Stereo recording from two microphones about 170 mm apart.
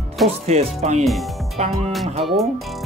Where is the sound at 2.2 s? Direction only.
Centre (ahead or behind).